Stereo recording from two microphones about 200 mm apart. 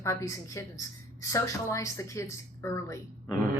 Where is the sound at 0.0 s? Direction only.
15° left (ahead or behind).